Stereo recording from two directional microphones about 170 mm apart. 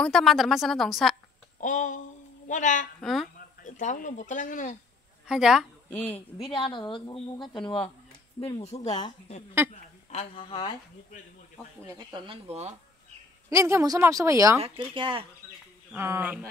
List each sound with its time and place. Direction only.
0.0 s a woman's voice: centre (ahead or behind)
1.6 s a sound: 45° left (ahead or behind)
2.4 s a woman's voice: 45° left (ahead or behind)
3.0 s speech: centre (ahead or behind)
3.3 s speech: 45° left (ahead or behind)
5.2 s a woman's voice: 5° right (ahead or behind)
6.4 s a woman's voice: 30° left (ahead or behind)
9.7 s a sound: 40° left (ahead or behind)
10.4 s a woman's voice: 30° left (ahead or behind)
11.8 s speech: 25° right (ahead or behind); by 12.7 s 40° right (ahead or behind)
13.5 s speech: 15° right (ahead or behind)
14.6 s speech: 30° right (ahead or behind)
15.9 s speech: 15° right (ahead or behind)